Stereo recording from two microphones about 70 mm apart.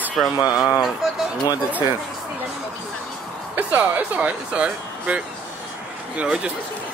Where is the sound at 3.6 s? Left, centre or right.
Right.